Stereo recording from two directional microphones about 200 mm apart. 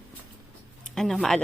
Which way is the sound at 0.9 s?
Centre (ahead or behind).